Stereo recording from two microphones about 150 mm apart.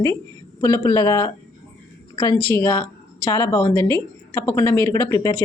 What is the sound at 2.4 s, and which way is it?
A woman's voice, 15° left (ahead or behind).